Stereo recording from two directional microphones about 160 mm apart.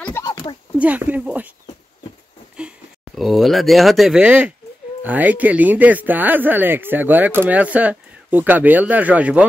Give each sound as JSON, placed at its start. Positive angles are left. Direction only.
{"t": 0.2, "sound": "a sound", "side_deg": 25}
{"t": 0.7, "sound": "speech", "side_deg": -10}
{"t": 3.2, "sound": "speech", "side_deg": 0}